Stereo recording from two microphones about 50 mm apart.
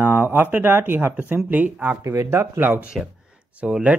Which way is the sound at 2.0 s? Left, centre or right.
Right.